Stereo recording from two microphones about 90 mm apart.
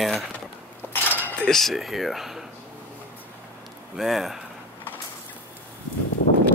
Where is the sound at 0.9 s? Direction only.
20° left (ahead or behind).